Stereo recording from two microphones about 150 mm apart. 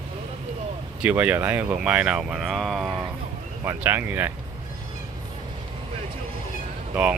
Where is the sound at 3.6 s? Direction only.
15° right (ahead or behind).